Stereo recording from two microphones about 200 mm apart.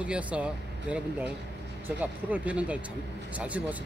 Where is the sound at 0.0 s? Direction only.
5° right (ahead or behind).